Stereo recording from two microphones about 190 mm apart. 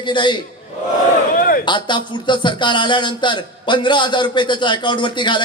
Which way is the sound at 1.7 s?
25° left (ahead or behind).